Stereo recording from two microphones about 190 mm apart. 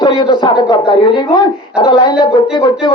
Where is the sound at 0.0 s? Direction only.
25° left (ahead or behind).